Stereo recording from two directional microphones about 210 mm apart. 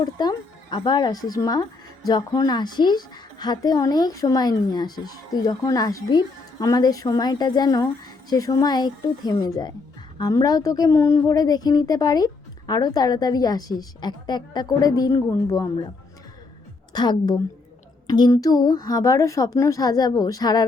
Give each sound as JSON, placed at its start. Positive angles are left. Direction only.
{"t": 0.0, "sound": "a woman's voice", "side_deg": 20}
{"t": 16.9, "sound": "a woman's voice", "side_deg": 20}